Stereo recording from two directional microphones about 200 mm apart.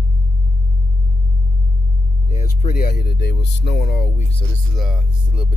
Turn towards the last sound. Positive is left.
turn(degrees=-5)  # may be behind; listen again after turning